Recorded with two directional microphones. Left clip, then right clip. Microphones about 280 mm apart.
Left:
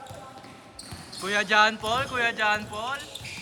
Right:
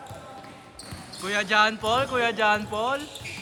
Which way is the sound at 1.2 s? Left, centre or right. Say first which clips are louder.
Left 1 dB; centre.